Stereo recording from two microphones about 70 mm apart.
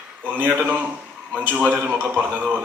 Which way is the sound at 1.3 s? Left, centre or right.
Right.